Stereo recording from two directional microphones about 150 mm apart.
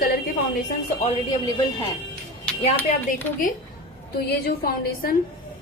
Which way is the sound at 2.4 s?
15° left (ahead or behind).